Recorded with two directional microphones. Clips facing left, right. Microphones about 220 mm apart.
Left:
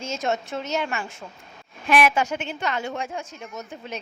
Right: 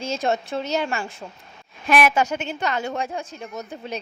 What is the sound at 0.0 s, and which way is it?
A woman's voice, 35° right (ahead or behind).